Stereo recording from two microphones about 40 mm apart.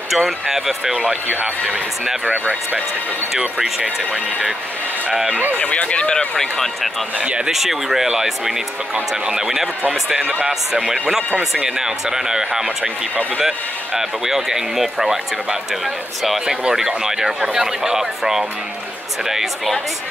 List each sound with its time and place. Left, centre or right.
0.1 s speech: centre
3.3 s speech: centre
5.3 s speech: right
5.6 s speech: left
6.3 s speech: centre
7.2 s speech: right
7.5 s speech: centre
12.6 s speech: right
13.4 s speech: centre
16.4 s speech: centre